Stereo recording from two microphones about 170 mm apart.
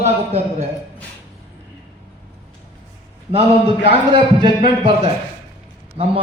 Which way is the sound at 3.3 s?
35° right (ahead or behind).